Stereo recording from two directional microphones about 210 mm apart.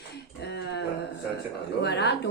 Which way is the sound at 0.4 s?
55° left (ahead or behind).